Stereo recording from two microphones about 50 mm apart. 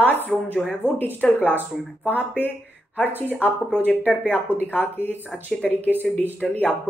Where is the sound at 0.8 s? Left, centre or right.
Right.